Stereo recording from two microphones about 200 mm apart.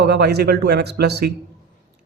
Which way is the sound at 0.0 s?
55° right (ahead or behind).